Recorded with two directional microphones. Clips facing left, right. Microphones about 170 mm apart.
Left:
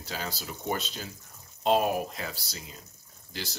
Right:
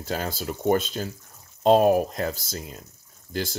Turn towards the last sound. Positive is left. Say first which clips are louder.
# right 10 dB
turn(degrees=-50)  # may be behind; listen again after turning